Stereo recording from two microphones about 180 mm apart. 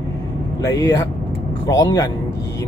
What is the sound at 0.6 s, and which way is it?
Speech, 20° left (ahead or behind).